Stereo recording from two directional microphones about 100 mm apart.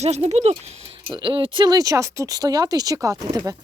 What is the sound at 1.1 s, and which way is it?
Speech, 55° right (ahead or behind).